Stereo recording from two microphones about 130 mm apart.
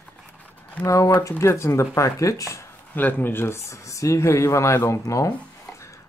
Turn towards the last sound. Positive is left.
turn(degrees=25)  # may be behind; listen again after turning